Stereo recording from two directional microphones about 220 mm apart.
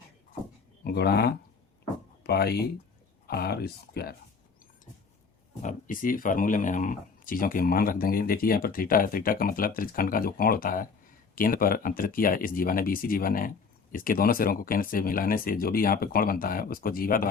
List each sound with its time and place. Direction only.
0.9 s speech: 45° left (ahead or behind)
5.6 s speech: 40° left (ahead or behind)